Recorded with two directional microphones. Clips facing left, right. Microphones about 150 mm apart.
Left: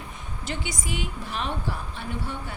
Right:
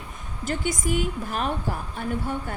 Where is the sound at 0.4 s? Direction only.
45° right (ahead or behind).